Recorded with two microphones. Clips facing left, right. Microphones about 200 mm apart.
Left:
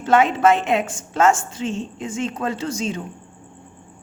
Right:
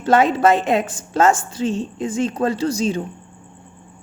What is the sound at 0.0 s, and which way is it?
A woman's voice, 35° right (ahead or behind).